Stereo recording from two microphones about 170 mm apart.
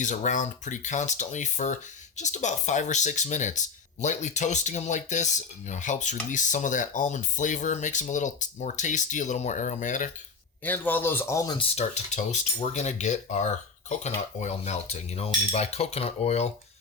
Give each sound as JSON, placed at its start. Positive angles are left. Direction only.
{"t": 0.0, "sound": "speech", "side_deg": 45}
{"t": 10.6, "sound": "a man's voice", "side_deg": 10}
{"t": 11.5, "sound": "speech", "side_deg": 40}